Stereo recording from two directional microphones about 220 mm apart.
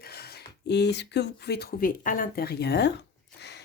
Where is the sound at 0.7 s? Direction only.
50° left (ahead or behind).